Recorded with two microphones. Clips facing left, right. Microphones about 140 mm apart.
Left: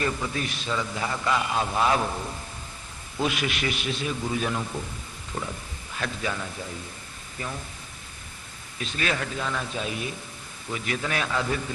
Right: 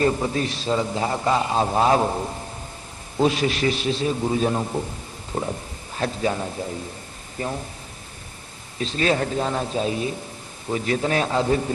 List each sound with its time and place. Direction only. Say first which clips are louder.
0.0 s a man's voice: right 7 dB; 35° right (ahead or behind)
8.8 s a man's voice: right 7 dB; 30° right (ahead or behind)